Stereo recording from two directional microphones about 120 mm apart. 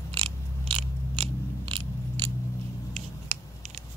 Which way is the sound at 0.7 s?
50° right (ahead or behind).